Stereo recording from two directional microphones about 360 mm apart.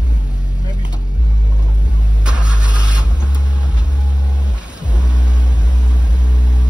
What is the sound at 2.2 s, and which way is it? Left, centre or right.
Vehicle, centre.